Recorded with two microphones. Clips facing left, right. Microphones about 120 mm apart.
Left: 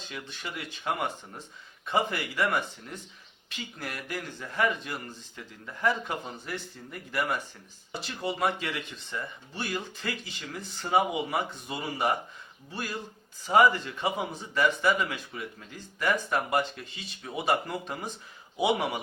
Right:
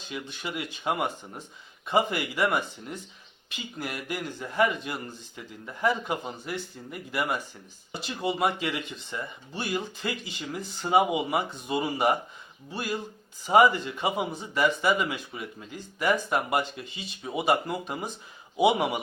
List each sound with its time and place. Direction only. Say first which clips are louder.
0.1 s speech: right 5 dB; 15° right (ahead or behind)
13.4 s speech: right 2 dB; 15° right (ahead or behind)